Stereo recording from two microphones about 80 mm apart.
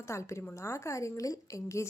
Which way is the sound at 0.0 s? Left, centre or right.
Left.